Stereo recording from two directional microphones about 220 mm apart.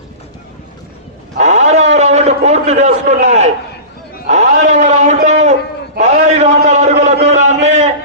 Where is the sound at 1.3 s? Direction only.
30° right (ahead or behind).